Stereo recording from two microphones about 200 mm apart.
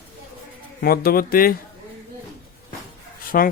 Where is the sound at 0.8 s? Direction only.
50° left (ahead or behind).